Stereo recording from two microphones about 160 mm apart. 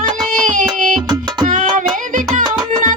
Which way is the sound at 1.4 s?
55° right (ahead or behind).